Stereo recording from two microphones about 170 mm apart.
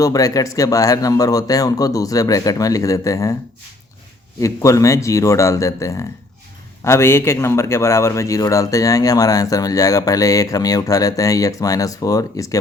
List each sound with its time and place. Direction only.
0.0 s a man's voice: 20° left (ahead or behind)
4.4 s a man's voice: 20° left (ahead or behind)